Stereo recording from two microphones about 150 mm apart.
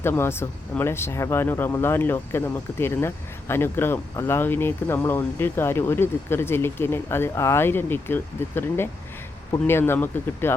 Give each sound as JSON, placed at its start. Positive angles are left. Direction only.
{"t": 0.0, "sound": "speech", "side_deg": 15}